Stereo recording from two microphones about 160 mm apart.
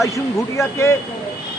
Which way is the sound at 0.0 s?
20° left (ahead or behind).